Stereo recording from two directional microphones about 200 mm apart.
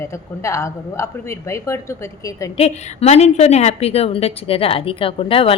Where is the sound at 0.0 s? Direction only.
15° left (ahead or behind).